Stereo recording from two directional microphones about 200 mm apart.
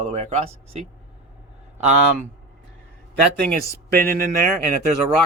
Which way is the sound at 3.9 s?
50° right (ahead or behind).